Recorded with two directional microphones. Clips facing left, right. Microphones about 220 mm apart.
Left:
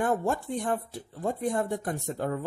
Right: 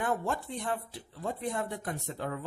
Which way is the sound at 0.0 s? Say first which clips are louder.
Left 5 dB; 45° left (ahead or behind).